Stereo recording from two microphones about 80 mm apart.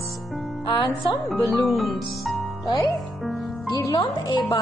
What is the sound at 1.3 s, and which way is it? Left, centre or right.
Speech, centre.